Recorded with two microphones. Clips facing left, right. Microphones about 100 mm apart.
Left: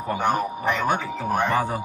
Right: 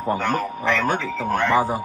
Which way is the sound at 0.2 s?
15° left (ahead or behind).